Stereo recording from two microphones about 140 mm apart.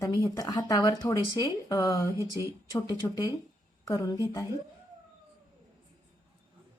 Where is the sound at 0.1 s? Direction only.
25° left (ahead or behind).